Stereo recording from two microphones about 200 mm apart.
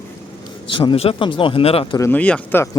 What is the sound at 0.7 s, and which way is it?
Speech, 25° left (ahead or behind).